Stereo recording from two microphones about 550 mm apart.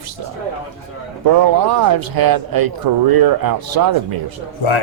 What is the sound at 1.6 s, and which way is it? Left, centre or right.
Speech, right.